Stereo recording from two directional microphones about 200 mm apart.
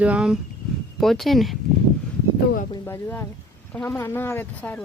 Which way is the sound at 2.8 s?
10° left (ahead or behind).